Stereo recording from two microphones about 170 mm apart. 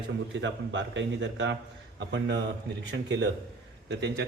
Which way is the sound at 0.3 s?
90° right.